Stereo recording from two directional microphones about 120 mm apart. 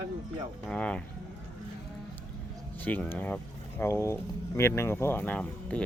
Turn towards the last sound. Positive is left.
turn(degrees=10)  # may be behind; listen again after turning